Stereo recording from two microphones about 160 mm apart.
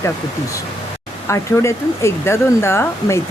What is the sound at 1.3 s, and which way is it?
Speech, 20° left (ahead or behind).